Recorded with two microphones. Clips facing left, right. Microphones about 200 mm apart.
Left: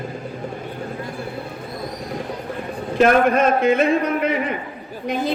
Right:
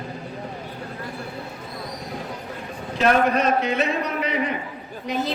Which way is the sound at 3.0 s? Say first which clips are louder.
Left 4 dB; 50° left (ahead or behind).